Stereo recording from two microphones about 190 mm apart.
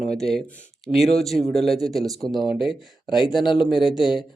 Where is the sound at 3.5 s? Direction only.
5° right (ahead or behind).